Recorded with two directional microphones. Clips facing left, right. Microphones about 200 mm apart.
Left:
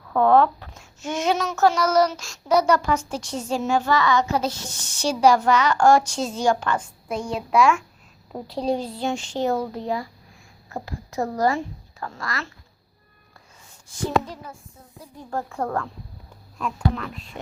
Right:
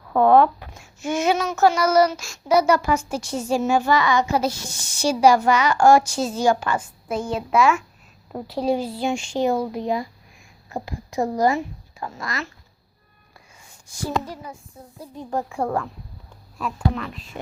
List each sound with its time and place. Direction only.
0.1 s a woman's voice: 15° right (ahead or behind)
13.8 s speech: 15° right (ahead or behind)